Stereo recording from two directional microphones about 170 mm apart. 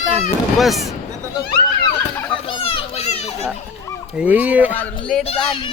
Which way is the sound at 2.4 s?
30° left (ahead or behind).